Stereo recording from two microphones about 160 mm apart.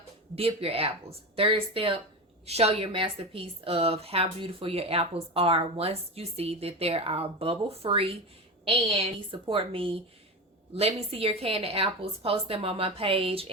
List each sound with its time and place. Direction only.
0.3 s speech: 35° right (ahead or behind)